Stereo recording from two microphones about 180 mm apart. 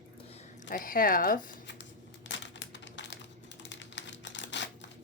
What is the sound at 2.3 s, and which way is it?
Crumpling, 80° left.